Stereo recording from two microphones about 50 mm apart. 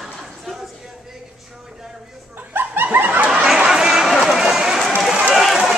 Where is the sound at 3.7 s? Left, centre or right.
Centre.